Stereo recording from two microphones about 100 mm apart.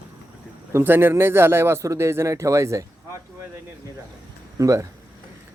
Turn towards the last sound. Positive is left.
turn(degrees=-35)  # may be behind; listen again after turning